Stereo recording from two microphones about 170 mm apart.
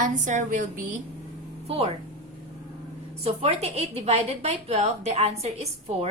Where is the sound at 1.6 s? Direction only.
35° right (ahead or behind).